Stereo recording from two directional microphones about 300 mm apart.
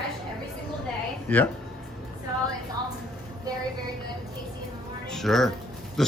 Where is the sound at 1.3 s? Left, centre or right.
Centre.